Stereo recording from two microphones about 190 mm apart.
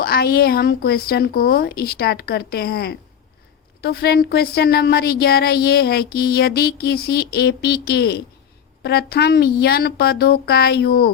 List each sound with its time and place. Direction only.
0.0 s a woman's voice: 55° left (ahead or behind)